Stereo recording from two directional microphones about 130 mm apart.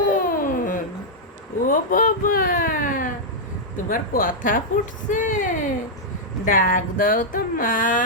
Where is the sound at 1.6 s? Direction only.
90° left.